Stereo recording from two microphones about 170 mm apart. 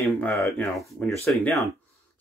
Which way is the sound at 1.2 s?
15° left (ahead or behind).